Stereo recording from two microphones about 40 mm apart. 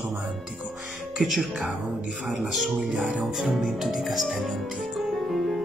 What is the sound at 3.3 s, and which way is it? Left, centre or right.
Music, centre.